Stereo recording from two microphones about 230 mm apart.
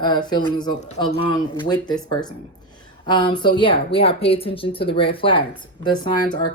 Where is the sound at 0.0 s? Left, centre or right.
Centre.